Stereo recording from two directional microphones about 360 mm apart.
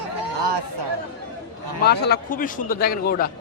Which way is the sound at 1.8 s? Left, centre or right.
Left.